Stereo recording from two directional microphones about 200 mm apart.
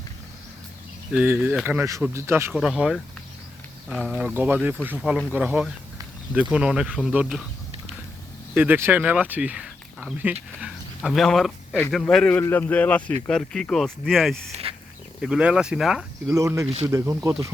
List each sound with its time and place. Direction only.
1.1 s speech: 10° right (ahead or behind)
2.5 s speech: centre (ahead or behind)
8.5 s speech: 10° right (ahead or behind)
14.5 s a sound: 30° right (ahead or behind)
15.2 s speech: 5° right (ahead or behind)
16.3 s speech: 15° right (ahead or behind)